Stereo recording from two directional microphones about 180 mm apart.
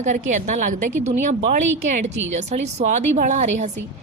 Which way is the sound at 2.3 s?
40° right (ahead or behind).